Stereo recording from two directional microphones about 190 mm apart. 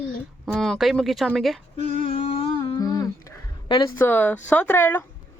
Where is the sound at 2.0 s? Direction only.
30° left (ahead or behind).